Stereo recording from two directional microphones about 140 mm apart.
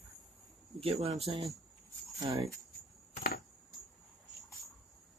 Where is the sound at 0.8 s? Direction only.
45° right (ahead or behind).